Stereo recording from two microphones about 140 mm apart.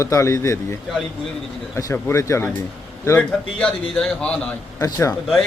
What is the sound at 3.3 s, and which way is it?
A man's voice, 5° left (ahead or behind).